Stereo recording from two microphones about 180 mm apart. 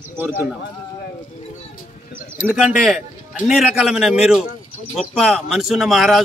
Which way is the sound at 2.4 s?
10° right (ahead or behind).